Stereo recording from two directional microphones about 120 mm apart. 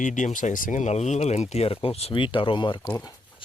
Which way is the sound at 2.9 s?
30° left (ahead or behind).